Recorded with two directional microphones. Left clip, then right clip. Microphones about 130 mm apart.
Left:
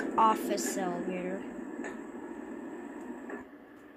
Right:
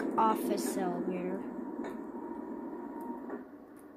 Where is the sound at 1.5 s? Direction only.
20° left (ahead or behind).